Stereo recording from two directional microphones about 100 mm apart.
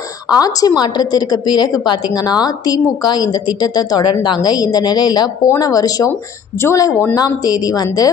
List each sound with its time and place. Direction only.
0.3 s a woman's voice: 40° left (ahead or behind)
6.6 s speech: 30° left (ahead or behind)
7.2 s a woman's voice: 40° left (ahead or behind)